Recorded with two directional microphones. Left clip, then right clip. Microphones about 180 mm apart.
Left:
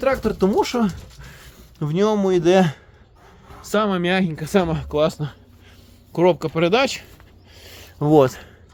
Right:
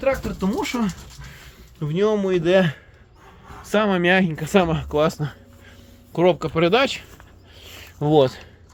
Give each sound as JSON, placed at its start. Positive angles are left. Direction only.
{"t": 0.0, "sound": "speech", "side_deg": 35}
{"t": 1.8, "sound": "speech", "side_deg": 35}
{"t": 3.7, "sound": "speech", "side_deg": 10}
{"t": 6.1, "sound": "speech", "side_deg": 20}
{"t": 7.6, "sound": "a sound", "side_deg": 30}